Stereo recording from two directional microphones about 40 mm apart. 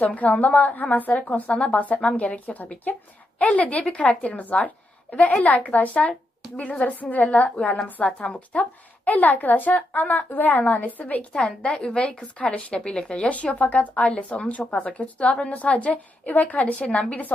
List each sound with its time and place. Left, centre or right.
0.0 s a woman's voice: left
6.0 s speech: left
6.8 s a woman's voice: left
9.0 s a woman's voice: left
10.6 s a woman's voice: left
10.9 s a woman's voice: left
11.3 s a woman's voice: left